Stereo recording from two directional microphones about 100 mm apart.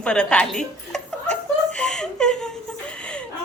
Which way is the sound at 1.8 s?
5° left (ahead or behind).